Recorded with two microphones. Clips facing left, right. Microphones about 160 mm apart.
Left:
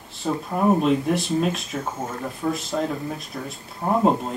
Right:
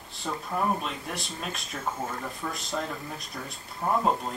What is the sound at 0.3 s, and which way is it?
Speech, 15° left (ahead or behind).